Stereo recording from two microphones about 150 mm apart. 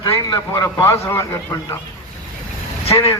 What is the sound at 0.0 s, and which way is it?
A man's voice, 25° left (ahead or behind).